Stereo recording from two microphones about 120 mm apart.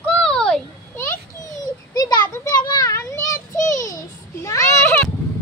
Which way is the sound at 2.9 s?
25° left (ahead or behind).